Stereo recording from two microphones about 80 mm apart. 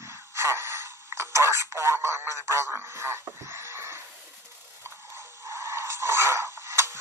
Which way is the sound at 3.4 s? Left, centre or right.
Right.